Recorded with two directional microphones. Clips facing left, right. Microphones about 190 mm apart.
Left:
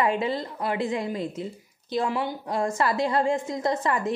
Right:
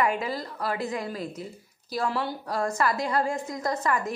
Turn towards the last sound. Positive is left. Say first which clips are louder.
# left 2 dB
turn(degrees=25)  # may be behind; listen again after turning